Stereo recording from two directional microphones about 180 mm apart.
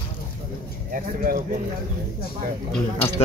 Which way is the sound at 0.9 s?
50° right (ahead or behind).